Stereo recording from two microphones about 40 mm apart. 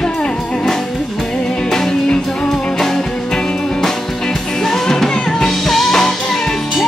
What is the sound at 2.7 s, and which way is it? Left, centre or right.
Music, centre.